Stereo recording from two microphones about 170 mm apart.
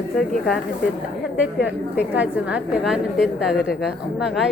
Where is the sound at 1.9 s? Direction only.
10° right (ahead or behind).